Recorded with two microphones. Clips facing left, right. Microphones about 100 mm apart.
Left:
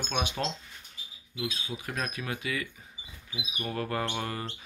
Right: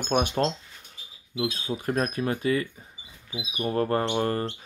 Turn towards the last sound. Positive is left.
turn(degrees=-45)  # may be behind; listen again after turning